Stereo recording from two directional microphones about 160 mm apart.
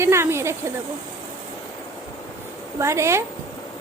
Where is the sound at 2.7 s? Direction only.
15° right (ahead or behind).